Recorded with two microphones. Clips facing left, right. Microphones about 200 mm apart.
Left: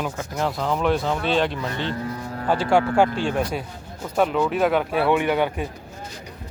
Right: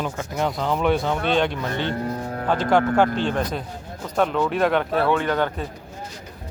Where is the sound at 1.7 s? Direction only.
45° right (ahead or behind).